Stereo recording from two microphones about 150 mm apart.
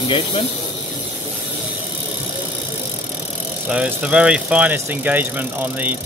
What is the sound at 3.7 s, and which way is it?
Speech, 5° right (ahead or behind).